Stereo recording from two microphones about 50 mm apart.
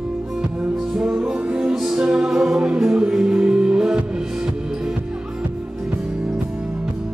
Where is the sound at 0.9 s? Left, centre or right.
Centre.